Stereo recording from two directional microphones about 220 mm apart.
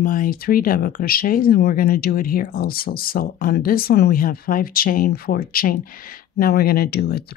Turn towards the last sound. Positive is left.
turn(degrees=45)  # may be behind; listen again after turning